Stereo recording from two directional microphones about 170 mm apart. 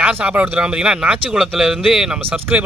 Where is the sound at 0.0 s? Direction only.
5° right (ahead or behind).